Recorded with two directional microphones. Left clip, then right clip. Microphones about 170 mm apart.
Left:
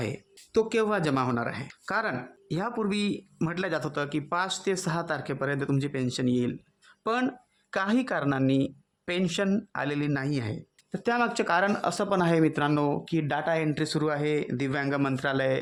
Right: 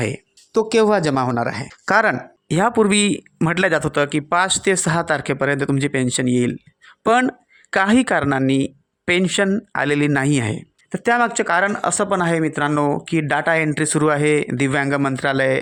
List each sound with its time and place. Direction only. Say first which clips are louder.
0.0 s speech: right 10 dB; 35° right (ahead or behind)